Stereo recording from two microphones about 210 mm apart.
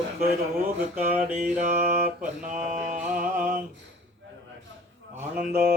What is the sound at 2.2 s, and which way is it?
Mantra, 35° right (ahead or behind).